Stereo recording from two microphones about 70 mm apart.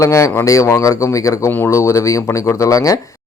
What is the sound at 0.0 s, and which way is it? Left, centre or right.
Speech, left.